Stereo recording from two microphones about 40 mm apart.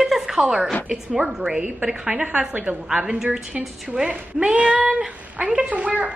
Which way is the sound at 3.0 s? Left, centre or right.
Centre.